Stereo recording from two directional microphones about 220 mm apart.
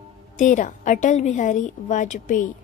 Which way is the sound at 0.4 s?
35° left (ahead or behind).